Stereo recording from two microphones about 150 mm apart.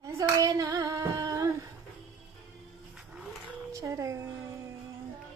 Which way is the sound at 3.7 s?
20° right (ahead or behind).